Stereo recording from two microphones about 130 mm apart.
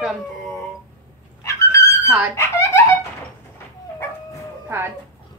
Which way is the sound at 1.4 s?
25° left (ahead or behind).